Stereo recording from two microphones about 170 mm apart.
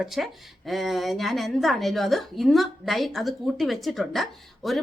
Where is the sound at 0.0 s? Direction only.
Centre (ahead or behind).